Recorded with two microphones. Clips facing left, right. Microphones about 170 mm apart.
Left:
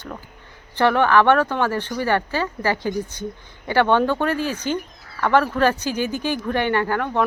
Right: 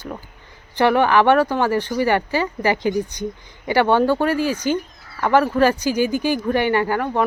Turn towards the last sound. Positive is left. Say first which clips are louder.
# right 2 dB
turn(degrees=-10)  # may be behind; listen again after turning